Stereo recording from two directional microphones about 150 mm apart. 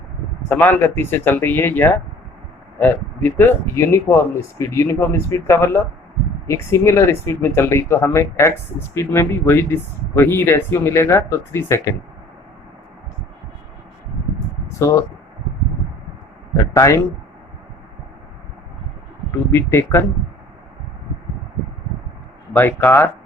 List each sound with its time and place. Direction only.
0.4 s speech: 15° left (ahead or behind)
14.7 s speech: 20° left (ahead or behind)
16.7 s speech: 20° left (ahead or behind)
19.5 s speech: 15° left (ahead or behind)
22.5 s speech: 15° left (ahead or behind)